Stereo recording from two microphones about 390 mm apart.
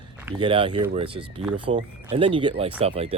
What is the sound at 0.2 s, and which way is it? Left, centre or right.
Speech, centre.